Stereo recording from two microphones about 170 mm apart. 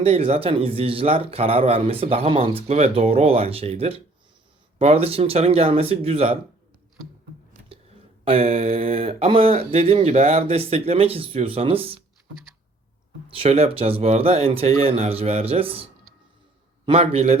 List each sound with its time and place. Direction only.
0.0 s a man's voice: 35° right (ahead or behind)
8.2 s a man's voice: 35° right (ahead or behind)
13.2 s a man's voice: 35° right (ahead or behind)